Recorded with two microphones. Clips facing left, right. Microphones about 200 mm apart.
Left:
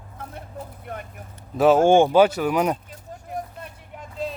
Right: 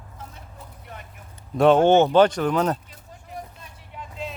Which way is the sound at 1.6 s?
5° left (ahead or behind).